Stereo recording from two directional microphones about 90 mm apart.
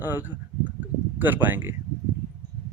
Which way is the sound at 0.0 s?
20° right (ahead or behind).